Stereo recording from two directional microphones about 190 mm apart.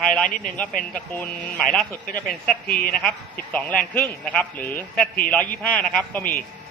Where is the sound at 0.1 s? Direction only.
5° left (ahead or behind).